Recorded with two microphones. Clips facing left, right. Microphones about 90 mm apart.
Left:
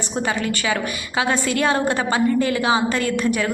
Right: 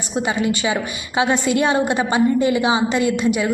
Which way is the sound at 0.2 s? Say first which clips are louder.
Right 3 dB; 15° right (ahead or behind).